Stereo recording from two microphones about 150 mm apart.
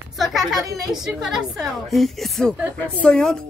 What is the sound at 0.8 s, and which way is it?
A woman's voice, centre (ahead or behind).